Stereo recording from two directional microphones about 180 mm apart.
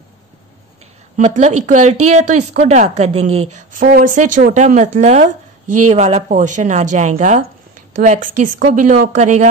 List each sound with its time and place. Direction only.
1.1 s a woman's voice: 40° right (ahead or behind)